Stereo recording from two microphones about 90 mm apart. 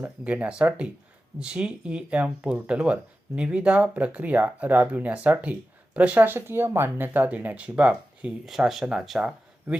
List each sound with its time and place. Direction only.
0.0 s speech: 15° right (ahead or behind)